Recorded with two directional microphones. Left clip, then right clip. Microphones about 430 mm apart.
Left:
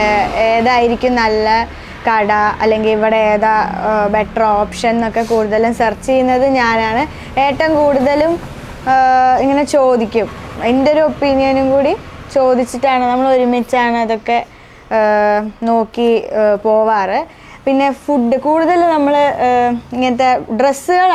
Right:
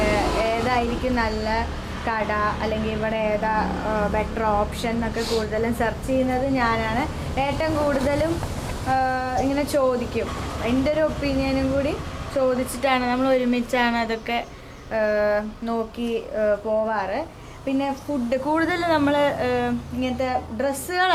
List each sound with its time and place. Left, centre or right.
0.4 s speech: left
14.8 s speech: left
18.3 s speech: left